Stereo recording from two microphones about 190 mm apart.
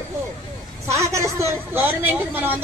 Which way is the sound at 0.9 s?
15° right (ahead or behind).